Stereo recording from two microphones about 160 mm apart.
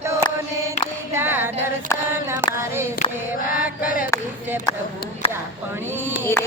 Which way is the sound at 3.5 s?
65° left (ahead or behind).